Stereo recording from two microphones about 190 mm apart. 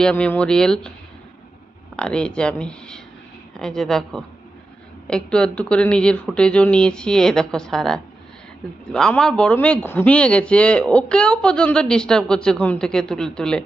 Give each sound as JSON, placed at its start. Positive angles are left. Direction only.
{"t": 0.0, "sound": "a man's voice", "side_deg": 5}
{"t": 2.0, "sound": "a man's voice", "side_deg": 5}